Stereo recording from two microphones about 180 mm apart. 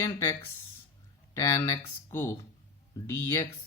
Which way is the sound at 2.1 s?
15° left (ahead or behind).